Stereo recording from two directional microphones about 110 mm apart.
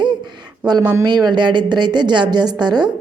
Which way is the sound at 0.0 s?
45° right (ahead or behind).